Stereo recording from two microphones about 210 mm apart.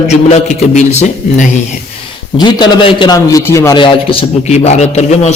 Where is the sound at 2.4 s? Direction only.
20° left (ahead or behind).